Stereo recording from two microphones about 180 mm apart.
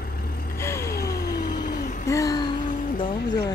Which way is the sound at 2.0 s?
20° left (ahead or behind).